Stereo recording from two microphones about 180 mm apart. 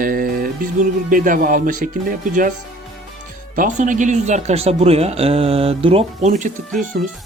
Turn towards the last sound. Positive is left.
turn(degrees=-55)  # may be behind; listen again after turning